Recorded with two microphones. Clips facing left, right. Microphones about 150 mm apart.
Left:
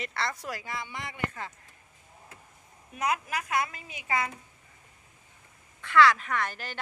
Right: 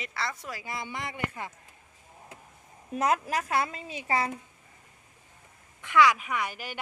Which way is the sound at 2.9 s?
35° right (ahead or behind).